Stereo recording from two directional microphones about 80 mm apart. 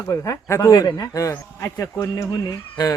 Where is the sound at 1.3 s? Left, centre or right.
Left.